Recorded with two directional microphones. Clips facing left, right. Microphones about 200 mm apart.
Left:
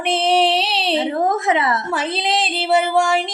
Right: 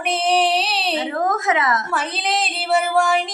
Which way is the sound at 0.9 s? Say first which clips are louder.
Left 4 dB; 25° left (ahead or behind).